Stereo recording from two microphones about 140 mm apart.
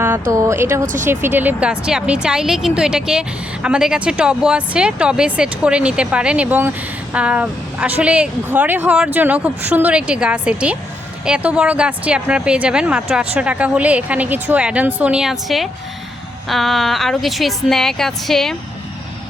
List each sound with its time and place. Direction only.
0.0 s a woman's voice: 20° right (ahead or behind); by 18.5 s centre (ahead or behind)